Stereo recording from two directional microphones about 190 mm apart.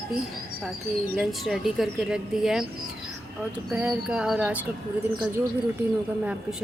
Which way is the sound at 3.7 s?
5° right (ahead or behind).